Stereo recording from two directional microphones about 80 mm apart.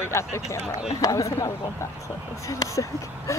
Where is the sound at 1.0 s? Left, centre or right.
Left.